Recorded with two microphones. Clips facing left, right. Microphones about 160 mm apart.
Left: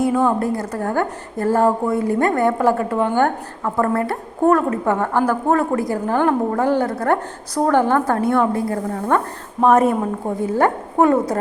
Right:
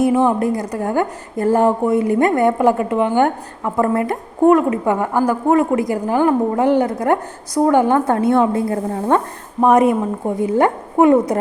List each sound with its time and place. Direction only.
0.0 s a woman's voice: 20° right (ahead or behind)